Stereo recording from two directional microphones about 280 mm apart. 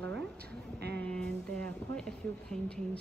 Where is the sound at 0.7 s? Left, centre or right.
Right.